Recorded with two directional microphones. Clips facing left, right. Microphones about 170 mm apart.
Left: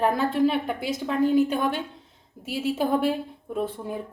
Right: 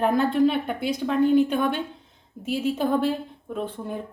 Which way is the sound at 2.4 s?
5° left (ahead or behind).